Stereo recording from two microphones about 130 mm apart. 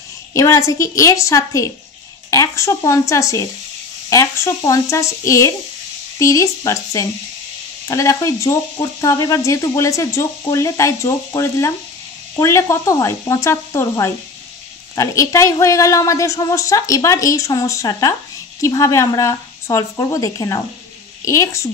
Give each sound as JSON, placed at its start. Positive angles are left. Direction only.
{"t": 0.3, "sound": "a woman's voice", "side_deg": 25}